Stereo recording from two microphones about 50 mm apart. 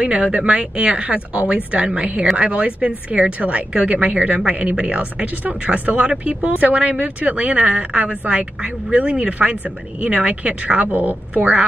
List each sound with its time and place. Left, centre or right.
0.0 s speech: right
10.9 s a woman's voice: right